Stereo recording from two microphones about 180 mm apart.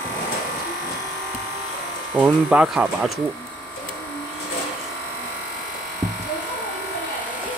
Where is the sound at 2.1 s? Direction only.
5° right (ahead or behind).